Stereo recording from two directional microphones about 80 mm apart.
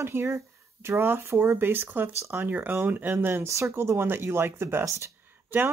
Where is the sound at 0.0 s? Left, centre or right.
Right.